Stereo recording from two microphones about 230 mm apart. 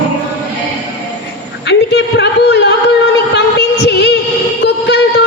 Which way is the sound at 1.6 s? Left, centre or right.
Left.